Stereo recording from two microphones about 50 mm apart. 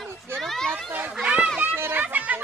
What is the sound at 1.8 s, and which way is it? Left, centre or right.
Speech, right.